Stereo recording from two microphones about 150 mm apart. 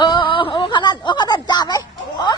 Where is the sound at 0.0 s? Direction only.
30° left (ahead or behind).